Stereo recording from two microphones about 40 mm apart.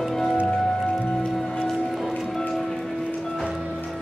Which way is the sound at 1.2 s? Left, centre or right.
Centre.